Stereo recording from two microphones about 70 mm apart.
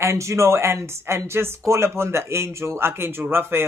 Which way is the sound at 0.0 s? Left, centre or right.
Right.